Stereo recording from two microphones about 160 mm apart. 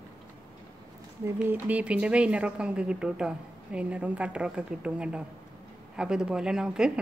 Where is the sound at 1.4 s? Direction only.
10° right (ahead or behind).